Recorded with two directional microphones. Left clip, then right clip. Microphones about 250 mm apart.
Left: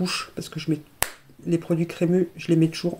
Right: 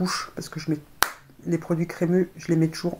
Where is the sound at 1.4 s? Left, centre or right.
Left.